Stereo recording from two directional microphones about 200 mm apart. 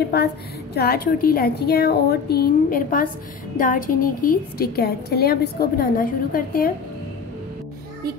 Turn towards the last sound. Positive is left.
turn(degrees=45)  # may be behind; listen again after turning